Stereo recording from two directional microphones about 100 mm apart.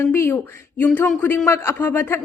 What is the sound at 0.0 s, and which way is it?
Speech, 25° left (ahead or behind).